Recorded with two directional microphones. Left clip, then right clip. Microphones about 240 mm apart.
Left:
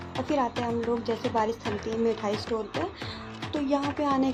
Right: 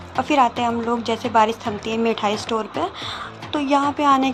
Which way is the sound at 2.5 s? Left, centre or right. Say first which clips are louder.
Right 7 dB; right.